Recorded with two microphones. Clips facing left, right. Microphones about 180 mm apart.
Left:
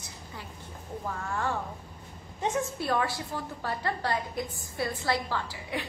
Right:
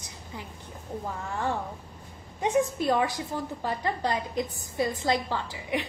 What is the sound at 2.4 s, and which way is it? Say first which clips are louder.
A woman's voice: right 5 dB; 15° right (ahead or behind).